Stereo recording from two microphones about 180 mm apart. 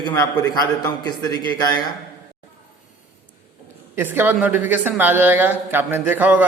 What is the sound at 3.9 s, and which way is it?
Speech, 10° right (ahead or behind).